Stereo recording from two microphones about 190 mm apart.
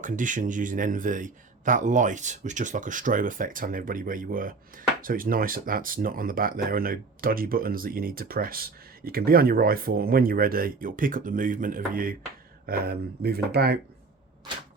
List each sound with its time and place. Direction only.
0.0 s speech: 40° right (ahead or behind)